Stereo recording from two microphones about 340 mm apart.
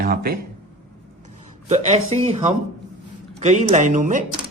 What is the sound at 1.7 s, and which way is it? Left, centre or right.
A man's voice, centre.